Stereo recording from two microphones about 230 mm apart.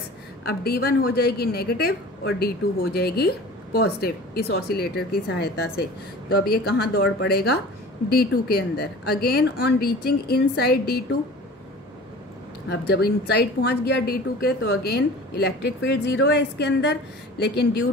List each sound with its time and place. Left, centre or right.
0.5 s a woman's voice: left
12.6 s a woman's voice: left